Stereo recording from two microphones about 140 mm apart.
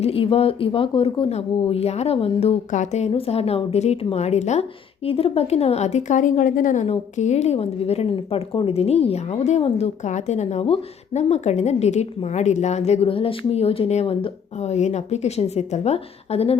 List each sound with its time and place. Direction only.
0.0 s a woman's voice: 45° left (ahead or behind)
2.6 s a woman's voice: 60° left (ahead or behind)
3.1 s a woman's voice: 45° left (ahead or behind); by 6.8 s 70° left (ahead or behind)
6.8 s a woman's voice: 50° left (ahead or behind)